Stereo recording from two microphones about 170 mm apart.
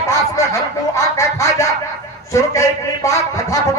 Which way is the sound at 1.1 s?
20° left (ahead or behind).